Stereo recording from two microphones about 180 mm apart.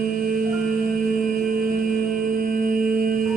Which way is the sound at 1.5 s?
50° right (ahead or behind).